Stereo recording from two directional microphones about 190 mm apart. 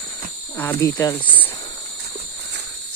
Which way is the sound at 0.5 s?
15° left (ahead or behind).